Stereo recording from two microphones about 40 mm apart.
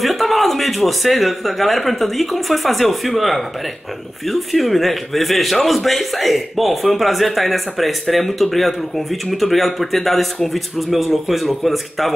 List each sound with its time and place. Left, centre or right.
0.0 s a man's voice: centre